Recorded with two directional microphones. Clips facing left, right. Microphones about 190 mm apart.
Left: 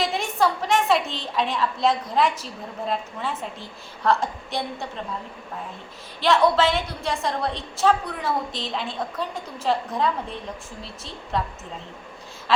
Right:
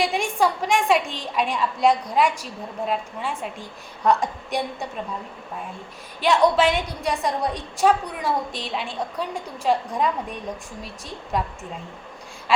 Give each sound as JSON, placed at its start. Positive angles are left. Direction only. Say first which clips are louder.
{"t": 0.0, "sound": "a woman's voice", "louder": "right 1 dB", "side_deg": -10}
{"t": 6.1, "sound": "a woman's voice", "louder": "right 1 dB", "side_deg": -15}